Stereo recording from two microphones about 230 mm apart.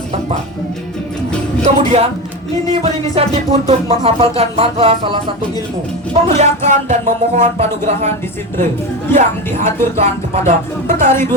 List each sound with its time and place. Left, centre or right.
1.6 s music: right
6.2 s music: right
9.1 s speech: centre
10.0 s music: right
11.1 s speech: centre